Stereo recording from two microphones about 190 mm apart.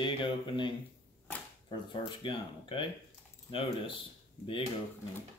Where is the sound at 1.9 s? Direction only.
25° left (ahead or behind).